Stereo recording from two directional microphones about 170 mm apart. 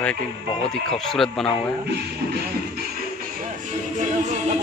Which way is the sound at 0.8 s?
5° left (ahead or behind).